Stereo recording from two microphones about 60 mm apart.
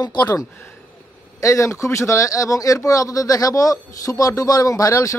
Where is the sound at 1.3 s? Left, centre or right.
Left.